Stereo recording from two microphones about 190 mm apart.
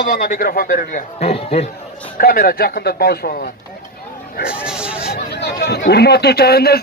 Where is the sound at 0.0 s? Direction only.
45° left (ahead or behind).